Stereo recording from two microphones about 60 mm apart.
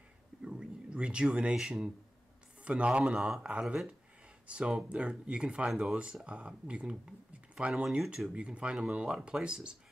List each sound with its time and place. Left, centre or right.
0.4 s speech: centre
3.1 s speech: centre
8.0 s speech: centre